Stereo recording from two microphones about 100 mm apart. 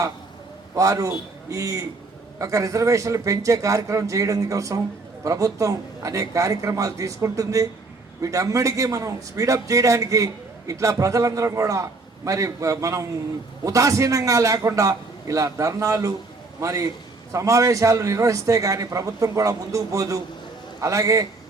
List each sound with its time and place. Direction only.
0.8 s a man's voice: 35° right (ahead or behind)